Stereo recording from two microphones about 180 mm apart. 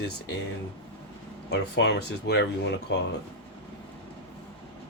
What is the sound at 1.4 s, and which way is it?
Speech, 70° left (ahead or behind).